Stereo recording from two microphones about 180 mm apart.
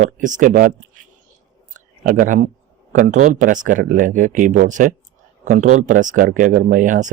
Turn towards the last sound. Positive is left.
turn(degrees=-45)  # may be behind; listen again after turning